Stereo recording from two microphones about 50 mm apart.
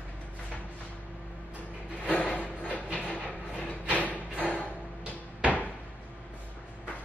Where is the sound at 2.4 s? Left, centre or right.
Right.